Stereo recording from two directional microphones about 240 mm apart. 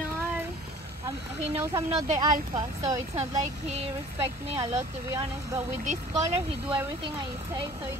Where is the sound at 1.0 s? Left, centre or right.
Centre.